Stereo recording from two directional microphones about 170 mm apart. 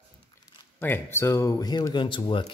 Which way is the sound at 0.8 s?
15° left (ahead or behind).